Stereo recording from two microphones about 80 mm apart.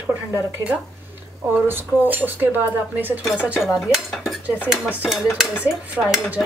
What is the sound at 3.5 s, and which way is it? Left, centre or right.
Cutlery, centre.